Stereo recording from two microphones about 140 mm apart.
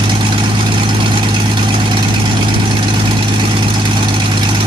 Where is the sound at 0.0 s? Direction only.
35° right (ahead or behind).